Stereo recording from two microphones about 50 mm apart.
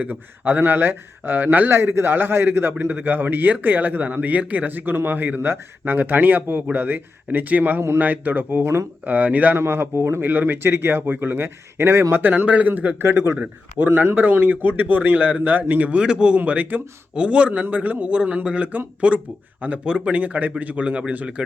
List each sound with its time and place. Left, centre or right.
0.0 s a man's voice: right
1.7 s a man's voice: right
9.6 s speech: right
12.1 s speech: right
12.5 s a man's voice: right
13.8 s a man's voice: right
16.0 s speech: centre
16.4 s a man's voice: right
17.2 s a man's voice: right